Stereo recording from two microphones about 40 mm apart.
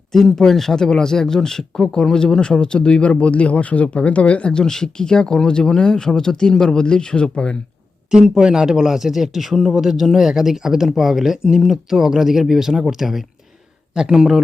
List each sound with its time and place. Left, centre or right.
0.1 s speech: centre; by 4.6 s left
4.6 s speech: centre
8.1 s speech: centre
13.9 s speech: centre